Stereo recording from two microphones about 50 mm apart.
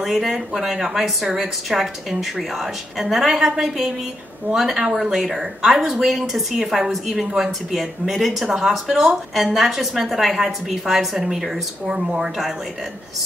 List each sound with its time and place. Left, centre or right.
0.0 s a woman's voice: centre
11.8 s speech: centre